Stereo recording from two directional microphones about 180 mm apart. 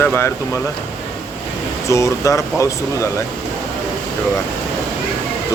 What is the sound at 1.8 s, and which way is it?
Speech, 15° left (ahead or behind).